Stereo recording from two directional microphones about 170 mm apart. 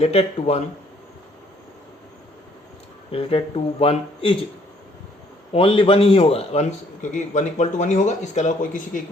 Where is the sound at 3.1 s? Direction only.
35° left (ahead or behind).